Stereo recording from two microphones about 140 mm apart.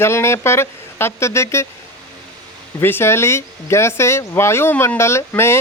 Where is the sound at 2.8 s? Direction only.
15° left (ahead or behind).